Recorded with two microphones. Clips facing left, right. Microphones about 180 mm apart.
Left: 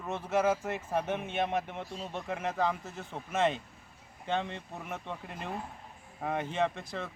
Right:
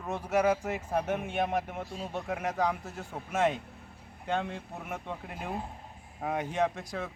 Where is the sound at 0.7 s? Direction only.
Centre (ahead or behind).